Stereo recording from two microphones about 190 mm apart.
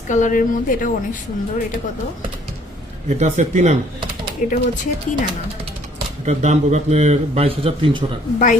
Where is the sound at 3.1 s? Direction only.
35° right (ahead or behind).